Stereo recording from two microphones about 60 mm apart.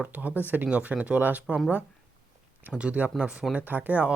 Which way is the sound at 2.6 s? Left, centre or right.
Right.